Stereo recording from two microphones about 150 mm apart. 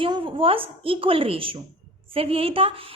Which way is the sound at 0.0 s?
35° right (ahead or behind).